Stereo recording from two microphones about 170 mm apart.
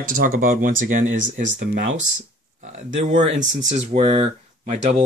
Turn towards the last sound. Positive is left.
turn(degrees=-40)  # may be behind; listen again after turning